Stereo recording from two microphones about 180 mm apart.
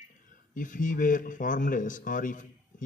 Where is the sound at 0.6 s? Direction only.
45° left (ahead or behind).